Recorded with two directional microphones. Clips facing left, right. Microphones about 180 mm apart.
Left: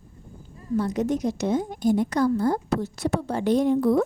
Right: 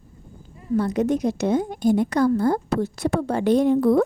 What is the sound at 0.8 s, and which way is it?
A woman's voice, 60° right (ahead or behind).